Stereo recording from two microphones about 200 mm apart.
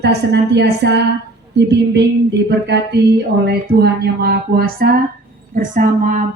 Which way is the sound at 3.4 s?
55° right (ahead or behind).